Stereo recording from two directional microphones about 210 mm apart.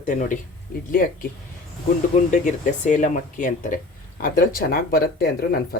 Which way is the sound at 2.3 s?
35° left (ahead or behind).